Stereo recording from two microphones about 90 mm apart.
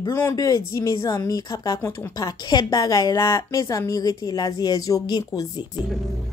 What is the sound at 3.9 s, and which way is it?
Speech, 45° left (ahead or behind).